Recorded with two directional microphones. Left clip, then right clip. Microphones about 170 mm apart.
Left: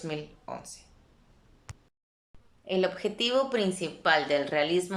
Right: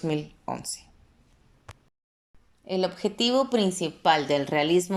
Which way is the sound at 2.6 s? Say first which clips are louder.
Right 1 dB; 35° right (ahead or behind).